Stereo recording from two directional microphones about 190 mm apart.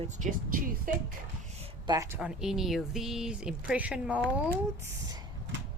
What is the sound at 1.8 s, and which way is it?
Speech, 20° right (ahead or behind).